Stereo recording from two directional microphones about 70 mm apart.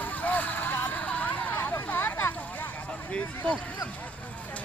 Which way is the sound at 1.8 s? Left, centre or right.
Left.